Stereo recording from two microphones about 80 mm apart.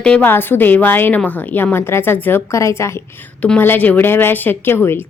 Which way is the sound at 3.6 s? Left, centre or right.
Left.